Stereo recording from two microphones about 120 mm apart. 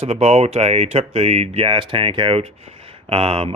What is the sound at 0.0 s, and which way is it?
Speech, 55° right (ahead or behind).